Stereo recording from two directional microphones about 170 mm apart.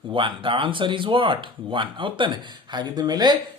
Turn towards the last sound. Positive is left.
turn(degrees=-25)  # may be behind; listen again after turning